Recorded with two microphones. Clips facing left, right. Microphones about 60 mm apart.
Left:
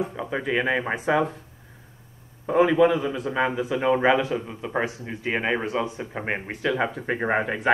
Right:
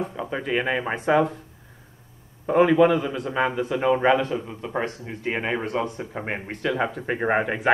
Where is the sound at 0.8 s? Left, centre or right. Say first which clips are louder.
Right 2 dB; centre.